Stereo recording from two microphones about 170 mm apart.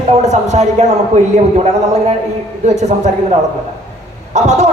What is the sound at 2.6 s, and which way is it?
Speech, 40° right (ahead or behind).